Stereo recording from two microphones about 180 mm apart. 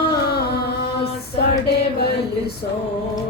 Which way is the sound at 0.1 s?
60° left (ahead or behind).